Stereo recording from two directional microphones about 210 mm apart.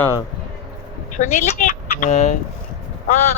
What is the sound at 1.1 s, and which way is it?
Speech, 35° left (ahead or behind).